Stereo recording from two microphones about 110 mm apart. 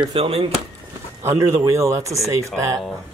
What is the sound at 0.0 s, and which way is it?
Speech, 60° right (ahead or behind).